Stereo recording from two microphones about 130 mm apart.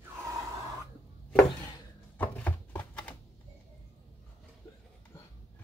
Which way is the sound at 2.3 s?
15° left (ahead or behind).